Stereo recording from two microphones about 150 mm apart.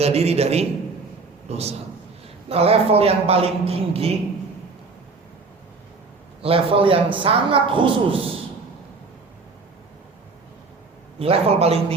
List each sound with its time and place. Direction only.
0.0 s a man's voice: 45° right (ahead or behind)
6.4 s a man's voice: 40° right (ahead or behind)
11.2 s a man's voice: 40° right (ahead or behind)